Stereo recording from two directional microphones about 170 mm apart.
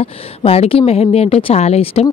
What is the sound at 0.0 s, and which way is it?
Speech, 35° left (ahead or behind).